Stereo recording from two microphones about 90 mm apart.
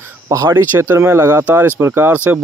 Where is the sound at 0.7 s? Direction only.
30° right (ahead or behind).